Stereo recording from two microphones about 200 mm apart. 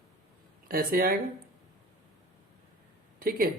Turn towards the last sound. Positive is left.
turn(degrees=-45)  # may be behind; listen again after turning